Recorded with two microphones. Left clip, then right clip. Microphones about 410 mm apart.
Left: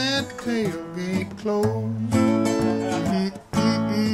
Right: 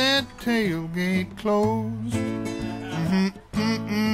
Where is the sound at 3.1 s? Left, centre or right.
Right.